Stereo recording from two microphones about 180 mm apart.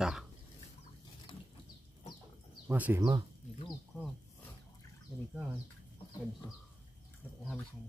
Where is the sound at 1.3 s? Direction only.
25° left (ahead or behind).